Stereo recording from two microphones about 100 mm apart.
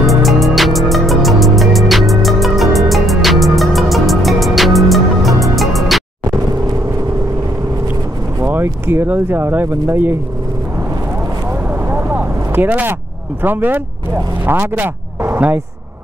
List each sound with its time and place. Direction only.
0.0 s music: centre (ahead or behind)
8.4 s speech: 25° right (ahead or behind)
11.9 s vehicle: 20° right (ahead or behind)
13.4 s speech: 20° right (ahead or behind)